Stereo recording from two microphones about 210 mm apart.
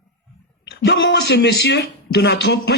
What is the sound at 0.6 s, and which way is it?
Speech, 55° left (ahead or behind).